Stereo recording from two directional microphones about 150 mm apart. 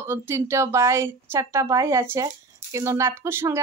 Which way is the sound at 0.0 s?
15° right (ahead or behind).